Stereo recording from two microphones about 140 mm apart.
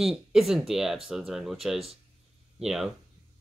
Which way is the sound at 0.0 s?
Centre (ahead or behind).